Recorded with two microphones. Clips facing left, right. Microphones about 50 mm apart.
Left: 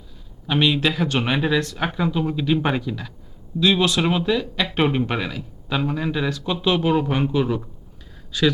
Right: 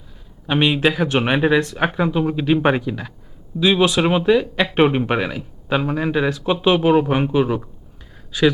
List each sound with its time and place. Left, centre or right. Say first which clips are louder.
0.4 s speech: right 3 dB; right